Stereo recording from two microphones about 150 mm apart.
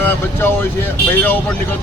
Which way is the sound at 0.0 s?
15° left (ahead or behind).